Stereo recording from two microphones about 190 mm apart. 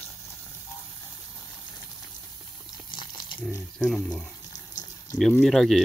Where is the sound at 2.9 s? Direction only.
25° left (ahead or behind).